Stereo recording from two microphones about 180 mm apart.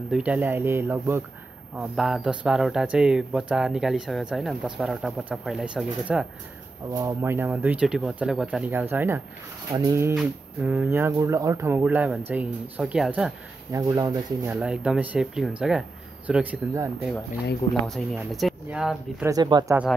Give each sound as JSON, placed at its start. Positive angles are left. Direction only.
{"t": 0.1, "sound": "speech", "side_deg": -5}
{"t": 1.8, "sound": "speech", "side_deg": 0}
{"t": 6.9, "sound": "speech", "side_deg": -15}
{"t": 13.7, "sound": "speech", "side_deg": -15}
{"t": 14.5, "sound": "speech", "side_deg": -5}
{"t": 17.8, "sound": "speech", "side_deg": 0}
{"t": 19.2, "sound": "speech", "side_deg": -20}